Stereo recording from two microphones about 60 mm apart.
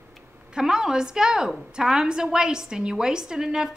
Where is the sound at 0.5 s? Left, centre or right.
Centre.